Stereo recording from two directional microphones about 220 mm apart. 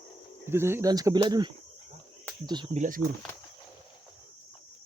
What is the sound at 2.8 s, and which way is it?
Speech, 40° right (ahead or behind).